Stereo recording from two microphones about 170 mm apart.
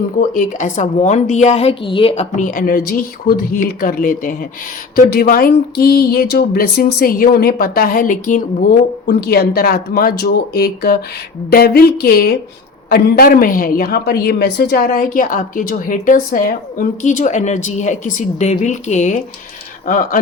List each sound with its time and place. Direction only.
0.2 s a woman's voice: 50° left (ahead or behind)
9.0 s a woman's voice: 70° left (ahead or behind); by 20.1 s 50° left (ahead or behind)